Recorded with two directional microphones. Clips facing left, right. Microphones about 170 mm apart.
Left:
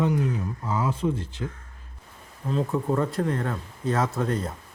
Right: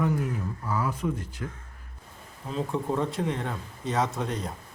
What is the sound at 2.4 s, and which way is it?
Speech, centre (ahead or behind).